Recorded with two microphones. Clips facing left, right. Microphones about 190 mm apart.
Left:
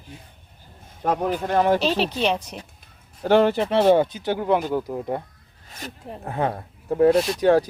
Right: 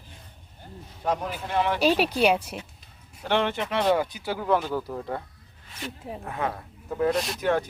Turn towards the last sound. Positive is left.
turn(degrees=35)  # may be behind; listen again after turning